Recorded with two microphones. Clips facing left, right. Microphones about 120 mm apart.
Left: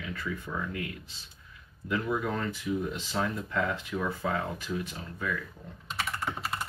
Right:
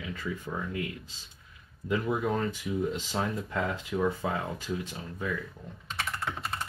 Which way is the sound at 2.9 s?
25° right (ahead or behind).